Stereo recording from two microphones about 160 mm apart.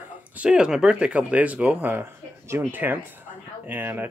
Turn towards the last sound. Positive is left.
turn(degrees=-10)  # may be behind; listen again after turning